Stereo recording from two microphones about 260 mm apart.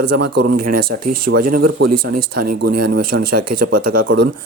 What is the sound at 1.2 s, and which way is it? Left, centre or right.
Speech, right.